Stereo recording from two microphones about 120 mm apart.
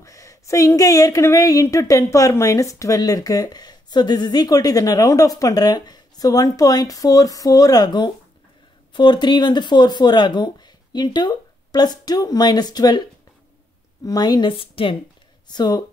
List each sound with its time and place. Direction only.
0.0 s speech: 25° left (ahead or behind)
14.0 s speech: 35° left (ahead or behind)
15.4 s speech: 35° left (ahead or behind)